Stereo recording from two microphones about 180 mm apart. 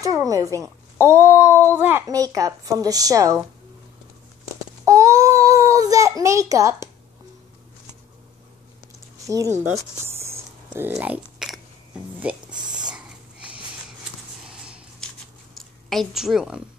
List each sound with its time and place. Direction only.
0.0 s a woman's voice: 20° right (ahead or behind)
4.8 s baby cry: 20° right (ahead or behind)
10.0 s a sound: 15° right (ahead or behind)
12.5 s a sound: 25° right (ahead or behind)
12.9 s whispering: 5° right (ahead or behind)
15.5 s a woman's voice: centre (ahead or behind)